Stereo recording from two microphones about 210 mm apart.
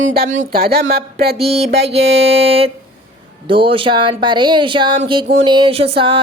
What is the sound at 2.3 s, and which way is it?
Speech, 25° right (ahead or behind).